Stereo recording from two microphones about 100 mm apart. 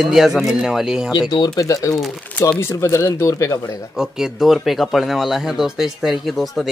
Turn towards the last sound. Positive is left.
turn(degrees=0)  # may be behind; listen again after turning